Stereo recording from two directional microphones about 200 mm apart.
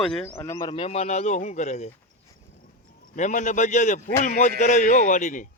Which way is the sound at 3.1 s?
40° left (ahead or behind).